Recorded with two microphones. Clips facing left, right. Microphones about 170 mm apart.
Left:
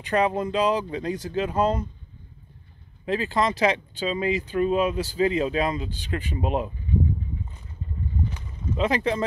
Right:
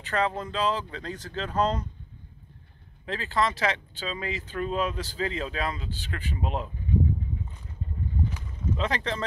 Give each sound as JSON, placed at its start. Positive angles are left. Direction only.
{"t": 0.0, "sound": "speech", "side_deg": 15}
{"t": 3.1, "sound": "speech", "side_deg": 15}
{"t": 8.7, "sound": "speech", "side_deg": 10}